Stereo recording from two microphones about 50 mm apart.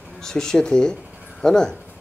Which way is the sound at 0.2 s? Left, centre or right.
Centre.